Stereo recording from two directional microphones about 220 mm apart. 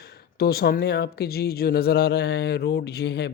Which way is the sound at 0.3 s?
45° left (ahead or behind).